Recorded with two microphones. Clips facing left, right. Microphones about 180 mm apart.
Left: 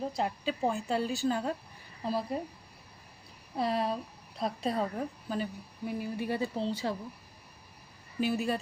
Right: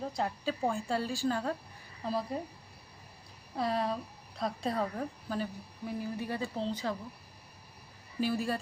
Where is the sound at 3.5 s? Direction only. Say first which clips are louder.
Left 1 dB; 25° left (ahead or behind).